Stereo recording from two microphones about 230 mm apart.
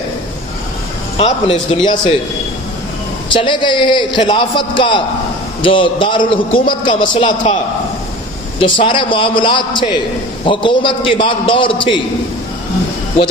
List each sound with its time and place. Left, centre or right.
1.2 s a man's voice: left
3.3 s a man's voice: left